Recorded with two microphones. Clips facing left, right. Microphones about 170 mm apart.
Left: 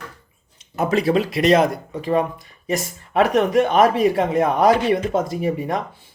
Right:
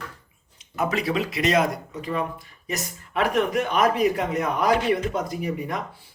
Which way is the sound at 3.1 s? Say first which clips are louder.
Left 6 dB; 25° left (ahead or behind).